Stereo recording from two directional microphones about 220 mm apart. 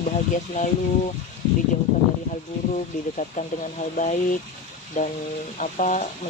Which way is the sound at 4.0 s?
35° left (ahead or behind).